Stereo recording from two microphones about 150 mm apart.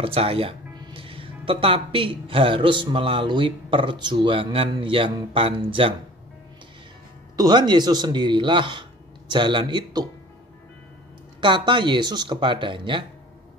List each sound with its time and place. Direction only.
0.0 s speech: 40° right (ahead or behind)
7.3 s speech: 30° right (ahead or behind)
11.4 s speech: 30° right (ahead or behind)